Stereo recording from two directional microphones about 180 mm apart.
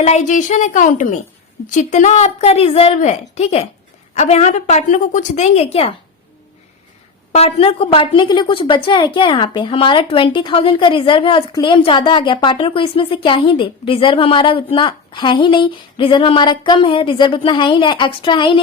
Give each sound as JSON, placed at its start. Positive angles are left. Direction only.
{"t": 0.0, "sound": "a woman's voice", "side_deg": 40}
{"t": 7.3, "sound": "a woman's voice", "side_deg": 35}